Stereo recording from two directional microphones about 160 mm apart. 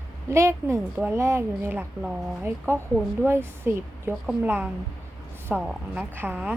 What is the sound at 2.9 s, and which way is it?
A woman's voice, 10° right (ahead or behind).